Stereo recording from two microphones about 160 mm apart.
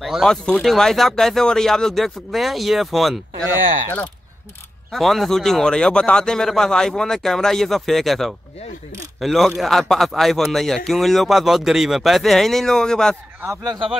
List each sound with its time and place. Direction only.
0.0 s a man's voice: centre (ahead or behind)
4.9 s a man's voice: centre (ahead or behind)
13.4 s speech: 20° right (ahead or behind)